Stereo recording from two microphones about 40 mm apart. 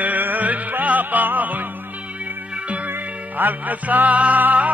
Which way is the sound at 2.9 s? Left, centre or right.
Right.